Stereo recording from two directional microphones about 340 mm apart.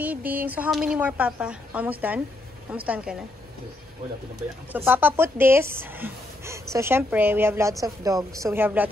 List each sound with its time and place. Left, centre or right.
0.0 s speech: centre
4.4 s speech: centre